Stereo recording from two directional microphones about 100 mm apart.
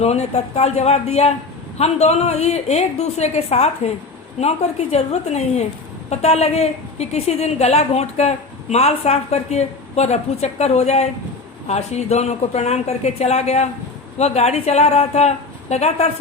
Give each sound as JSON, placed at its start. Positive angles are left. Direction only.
{"t": 0.0, "sound": "a woman's voice", "side_deg": 90}